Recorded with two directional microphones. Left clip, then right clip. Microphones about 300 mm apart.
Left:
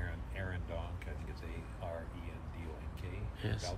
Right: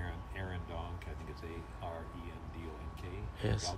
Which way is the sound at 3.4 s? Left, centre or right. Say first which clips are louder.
Right 4 dB; centre.